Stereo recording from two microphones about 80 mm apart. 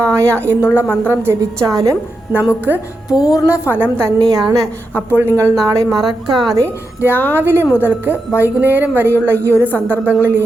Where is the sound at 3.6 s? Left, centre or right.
Right.